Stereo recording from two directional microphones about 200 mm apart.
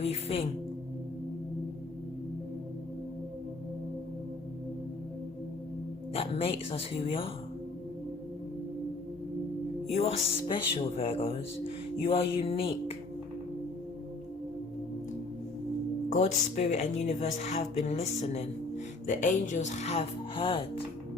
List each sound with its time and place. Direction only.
0.0 s speech: 30° left (ahead or behind)
6.1 s speech: 30° left (ahead or behind)
9.9 s speech: 30° left (ahead or behind)
16.1 s speech: 35° left (ahead or behind)